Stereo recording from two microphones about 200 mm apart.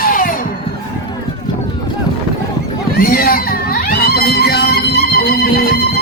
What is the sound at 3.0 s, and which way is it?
Baby cry, 45° left (ahead or behind).